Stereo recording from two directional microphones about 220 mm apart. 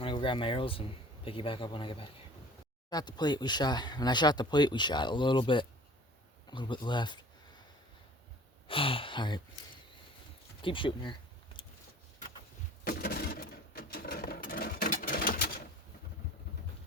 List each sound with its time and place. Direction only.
0.0 s speech: 25° left (ahead or behind)
8.6 s speech: 25° left (ahead or behind)
10.6 s speech: 25° left (ahead or behind)
12.8 s sewing machine: 45° left (ahead or behind)